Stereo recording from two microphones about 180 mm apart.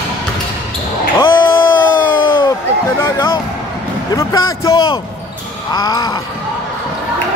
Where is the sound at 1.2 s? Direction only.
25° left (ahead or behind).